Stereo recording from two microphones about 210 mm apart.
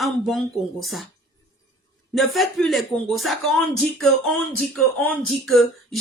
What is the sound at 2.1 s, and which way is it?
Speech, centre (ahead or behind).